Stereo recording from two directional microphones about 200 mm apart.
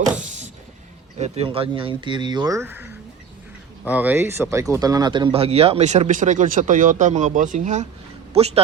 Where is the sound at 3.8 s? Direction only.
10° right (ahead or behind).